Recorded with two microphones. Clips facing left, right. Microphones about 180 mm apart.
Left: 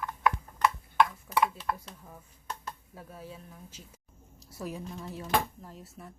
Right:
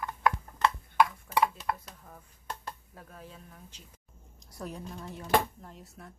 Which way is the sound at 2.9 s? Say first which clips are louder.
Left 3 dB; 10° left (ahead or behind).